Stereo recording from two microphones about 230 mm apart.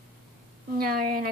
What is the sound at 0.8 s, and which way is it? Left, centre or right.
Speech, right.